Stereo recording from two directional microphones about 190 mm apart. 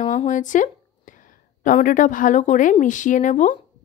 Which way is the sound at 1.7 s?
45° left (ahead or behind).